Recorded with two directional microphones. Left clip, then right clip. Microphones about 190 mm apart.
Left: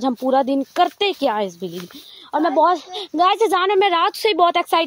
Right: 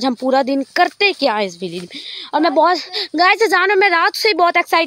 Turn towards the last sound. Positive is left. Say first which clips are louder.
# right 2 dB
turn(degrees=-5)  # may be behind; listen again after turning